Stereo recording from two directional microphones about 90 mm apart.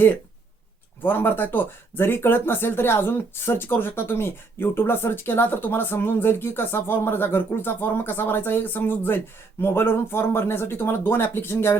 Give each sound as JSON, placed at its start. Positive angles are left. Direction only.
{"t": 1.0, "sound": "speech", "side_deg": 25}